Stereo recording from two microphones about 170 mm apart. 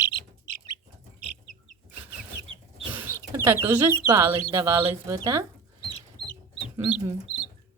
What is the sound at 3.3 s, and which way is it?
Speech, 15° right (ahead or behind).